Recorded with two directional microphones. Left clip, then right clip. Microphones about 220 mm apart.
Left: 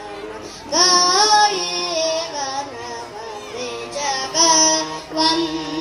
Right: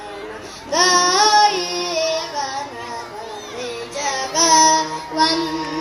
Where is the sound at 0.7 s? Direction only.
30° right (ahead or behind).